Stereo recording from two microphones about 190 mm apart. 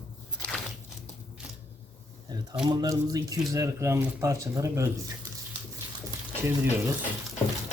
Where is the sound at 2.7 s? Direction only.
20° right (ahead or behind).